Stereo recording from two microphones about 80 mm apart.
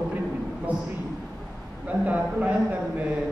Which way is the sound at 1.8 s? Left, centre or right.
Centre.